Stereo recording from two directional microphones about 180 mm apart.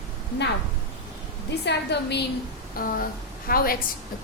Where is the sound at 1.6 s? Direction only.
70° left (ahead or behind).